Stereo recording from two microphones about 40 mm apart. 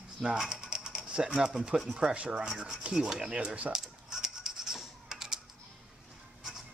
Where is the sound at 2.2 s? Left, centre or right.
Right.